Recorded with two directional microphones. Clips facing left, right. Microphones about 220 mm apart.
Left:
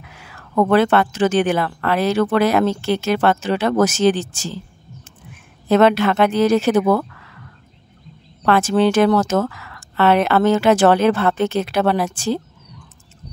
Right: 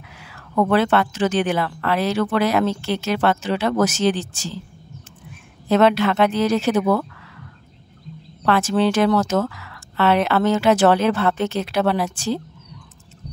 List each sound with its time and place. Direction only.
0.1 s speech: 50° left (ahead or behind)
5.7 s speech: 50° left (ahead or behind)
8.5 s speech: 50° left (ahead or behind)